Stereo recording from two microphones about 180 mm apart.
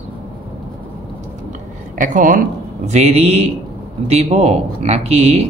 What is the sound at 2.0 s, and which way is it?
Speech, 45° right (ahead or behind).